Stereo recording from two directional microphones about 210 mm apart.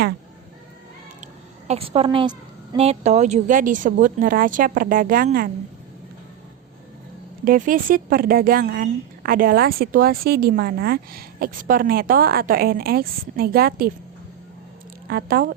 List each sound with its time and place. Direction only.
1.6 s a woman's voice: 30° right (ahead or behind)
7.4 s a woman's voice: 40° right (ahead or behind)
15.0 s a woman's voice: 45° right (ahead or behind)